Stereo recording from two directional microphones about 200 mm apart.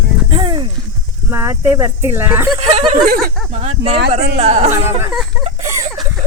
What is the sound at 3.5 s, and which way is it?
Speech, 35° right (ahead or behind).